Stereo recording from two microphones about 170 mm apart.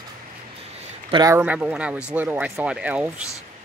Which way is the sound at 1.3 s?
10° right (ahead or behind).